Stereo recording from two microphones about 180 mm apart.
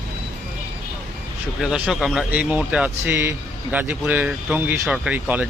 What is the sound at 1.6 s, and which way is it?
A man's voice, 5° right (ahead or behind).